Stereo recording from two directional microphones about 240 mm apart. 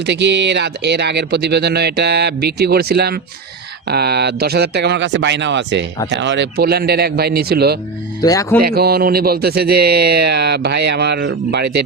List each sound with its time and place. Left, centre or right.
0.0 s speech: right
8.2 s speech: centre
8.6 s speech: right